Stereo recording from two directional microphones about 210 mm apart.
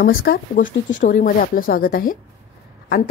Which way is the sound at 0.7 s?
60° left (ahead or behind).